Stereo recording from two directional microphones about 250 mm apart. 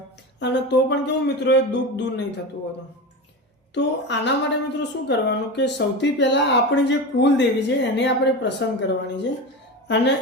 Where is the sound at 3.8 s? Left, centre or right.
Left.